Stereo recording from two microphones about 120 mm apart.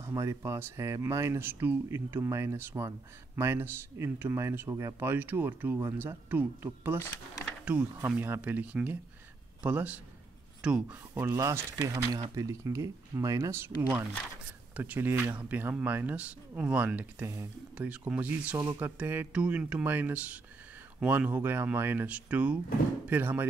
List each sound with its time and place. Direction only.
0.0 s speech: 25° right (ahead or behind)
8.2 s a man's voice: 15° right (ahead or behind)
11.1 s speech: 20° right (ahead or behind)
18.6 s speech: 20° right (ahead or behind)